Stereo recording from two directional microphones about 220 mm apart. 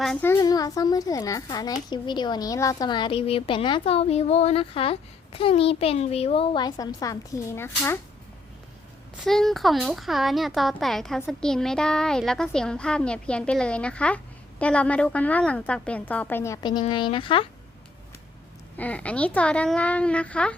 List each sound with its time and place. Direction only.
0.0 s a woman's voice: 5° left (ahead or behind)
9.2 s a woman's voice: centre (ahead or behind); by 17.5 s 25° left (ahead or behind)
18.8 s speech: 5° left (ahead or behind)